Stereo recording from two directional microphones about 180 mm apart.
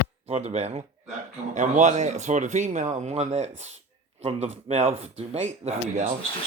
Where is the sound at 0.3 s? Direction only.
35° right (ahead or behind).